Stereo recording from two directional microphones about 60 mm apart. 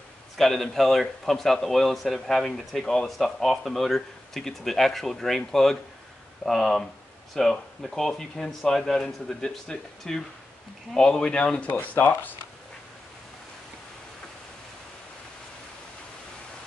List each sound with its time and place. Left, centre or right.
0.4 s speech: centre
11.8 s speech: left